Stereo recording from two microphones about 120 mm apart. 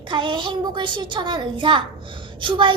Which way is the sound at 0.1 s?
45° right (ahead or behind).